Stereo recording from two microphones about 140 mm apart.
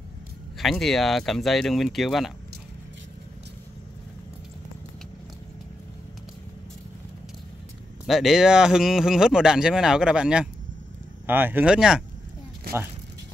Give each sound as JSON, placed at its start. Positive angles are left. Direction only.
{"t": 0.6, "sound": "speech", "side_deg": 0}
{"t": 8.1, "sound": "speech", "side_deg": 0}